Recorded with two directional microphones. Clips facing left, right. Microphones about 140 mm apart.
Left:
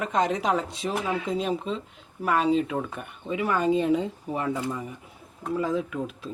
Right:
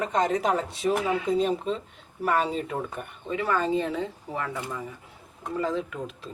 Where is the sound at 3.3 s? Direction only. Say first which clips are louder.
Left 2 dB; 15° left (ahead or behind).